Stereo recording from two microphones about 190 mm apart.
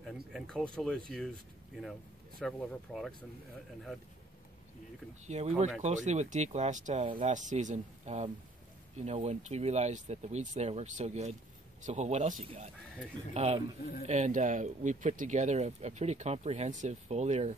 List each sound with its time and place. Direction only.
0.0 s speech: centre (ahead or behind)
5.2 s speech: 35° right (ahead or behind)